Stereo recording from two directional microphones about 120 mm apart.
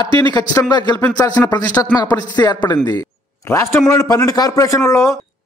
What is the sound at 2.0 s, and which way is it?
A man's voice, 35° left (ahead or behind).